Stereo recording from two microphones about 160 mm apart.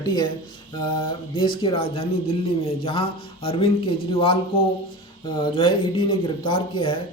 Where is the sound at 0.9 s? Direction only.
30° left (ahead or behind).